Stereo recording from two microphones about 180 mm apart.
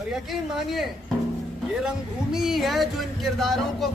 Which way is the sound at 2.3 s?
Centre (ahead or behind).